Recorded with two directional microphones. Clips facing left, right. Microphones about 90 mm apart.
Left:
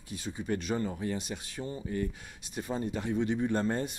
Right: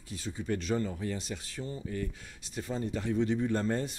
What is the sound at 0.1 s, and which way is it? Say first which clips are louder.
Speech: left 1 dB; 15° left (ahead or behind).